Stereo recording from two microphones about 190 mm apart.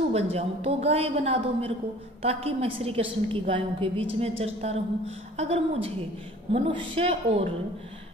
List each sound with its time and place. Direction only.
0.1 s a woman's voice: 35° right (ahead or behind)